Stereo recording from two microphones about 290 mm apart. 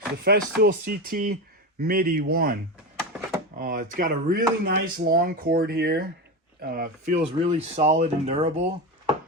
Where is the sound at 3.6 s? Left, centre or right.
Right.